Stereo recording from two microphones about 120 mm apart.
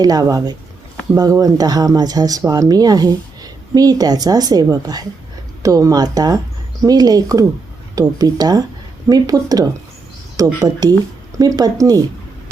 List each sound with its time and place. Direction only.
0.0 s speech: 30° right (ahead or behind)